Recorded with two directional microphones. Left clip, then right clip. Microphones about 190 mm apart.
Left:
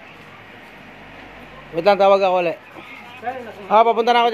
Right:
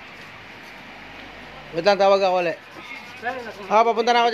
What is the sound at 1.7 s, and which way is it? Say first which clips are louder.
Speech: left 3 dB; centre (ahead or behind).